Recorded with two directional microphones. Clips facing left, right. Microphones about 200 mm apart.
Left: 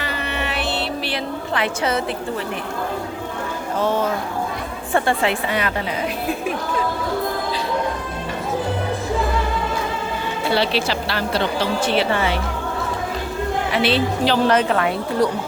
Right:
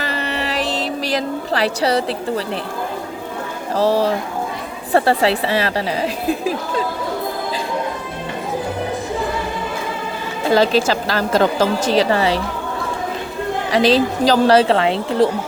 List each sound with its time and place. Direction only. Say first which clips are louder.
0.0 s music: right 3 dB; 35° right (ahead or behind)
0.7 s a sound: right 3 dB; 40° right (ahead or behind)
3.8 s a woman's voice: right 5 dB; 35° right (ahead or behind)
10.4 s a woman's voice: right 6 dB; 40° right (ahead or behind)
13.7 s a woman's voice: right 6 dB; 35° right (ahead or behind)